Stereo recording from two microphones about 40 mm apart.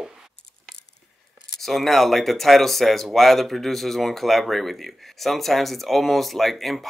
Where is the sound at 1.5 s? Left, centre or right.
Centre.